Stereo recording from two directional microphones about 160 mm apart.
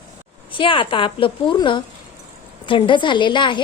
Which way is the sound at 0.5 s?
30° left (ahead or behind).